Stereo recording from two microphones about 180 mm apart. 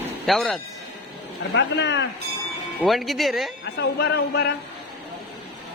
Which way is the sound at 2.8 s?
Centre (ahead or behind).